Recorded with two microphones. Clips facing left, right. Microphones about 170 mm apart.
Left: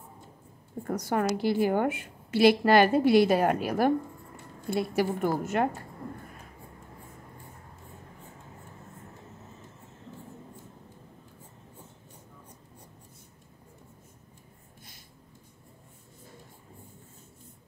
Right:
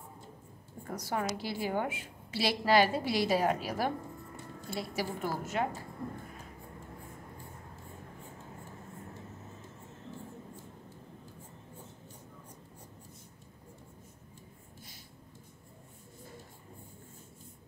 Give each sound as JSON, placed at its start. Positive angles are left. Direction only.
{"t": 0.8, "sound": "a woman's voice", "side_deg": 55}